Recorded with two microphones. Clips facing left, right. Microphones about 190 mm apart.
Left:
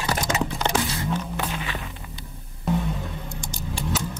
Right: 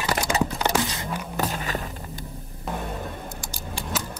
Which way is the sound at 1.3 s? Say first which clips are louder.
Right 2 dB; 40° right (ahead or behind).